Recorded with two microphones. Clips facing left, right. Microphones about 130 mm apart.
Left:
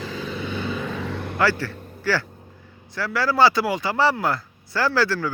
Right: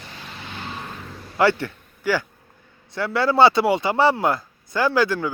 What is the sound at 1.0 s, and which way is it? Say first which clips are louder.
Vehicle: left 10 dB; 70° left (ahead or behind).